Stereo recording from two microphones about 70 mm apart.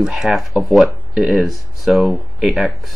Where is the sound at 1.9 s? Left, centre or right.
Right.